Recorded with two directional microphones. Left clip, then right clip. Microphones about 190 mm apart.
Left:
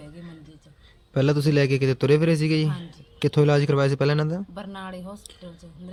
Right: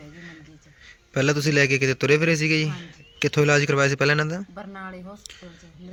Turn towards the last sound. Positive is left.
turn(degrees=15)  # may be behind; listen again after turning